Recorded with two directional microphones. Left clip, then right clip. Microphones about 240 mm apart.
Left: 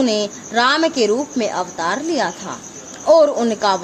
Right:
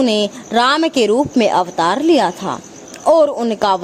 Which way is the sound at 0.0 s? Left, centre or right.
Right.